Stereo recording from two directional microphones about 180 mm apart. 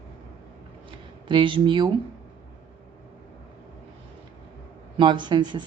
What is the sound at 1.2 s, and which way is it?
Speech, 30° right (ahead or behind).